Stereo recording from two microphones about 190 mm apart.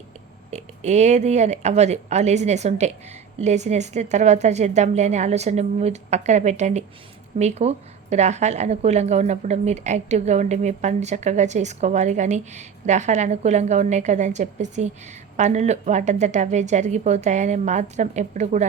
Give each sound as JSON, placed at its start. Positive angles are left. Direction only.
{"t": 0.5, "sound": "a woman's voice", "side_deg": -35}